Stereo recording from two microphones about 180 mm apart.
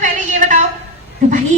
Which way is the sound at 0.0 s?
45° right (ahead or behind).